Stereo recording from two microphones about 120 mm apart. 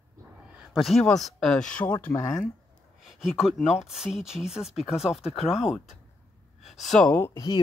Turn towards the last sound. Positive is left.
turn(degrees=20)  # may be behind; listen again after turning